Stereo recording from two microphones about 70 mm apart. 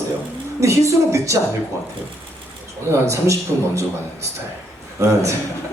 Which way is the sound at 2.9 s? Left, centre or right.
Right.